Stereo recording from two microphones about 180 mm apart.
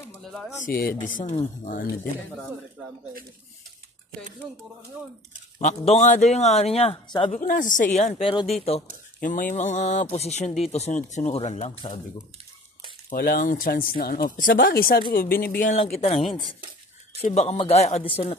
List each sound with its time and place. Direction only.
0.2 s pigeon: 5° left (ahead or behind)
0.7 s speech: 55° left (ahead or behind)
5.6 s speech: 40° left (ahead or behind)
7.3 s speech: 45° left (ahead or behind); by 8.5 s 30° left (ahead or behind)
9.2 s speech: 45° left (ahead or behind)
13.1 s speech: 55° left (ahead or behind)
15.7 s speech: 35° left (ahead or behind)
17.2 s speech: 35° left (ahead or behind)